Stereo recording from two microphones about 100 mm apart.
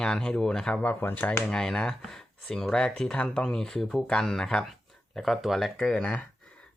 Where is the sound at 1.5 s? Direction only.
5° left (ahead or behind).